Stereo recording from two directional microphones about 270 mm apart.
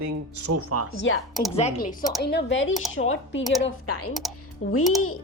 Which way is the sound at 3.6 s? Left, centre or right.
Left.